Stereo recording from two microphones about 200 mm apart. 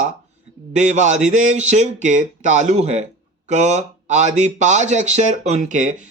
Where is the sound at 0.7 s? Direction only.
35° right (ahead or behind).